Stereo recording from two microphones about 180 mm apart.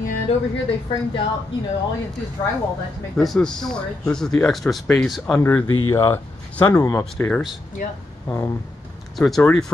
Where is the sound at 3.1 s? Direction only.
Centre (ahead or behind).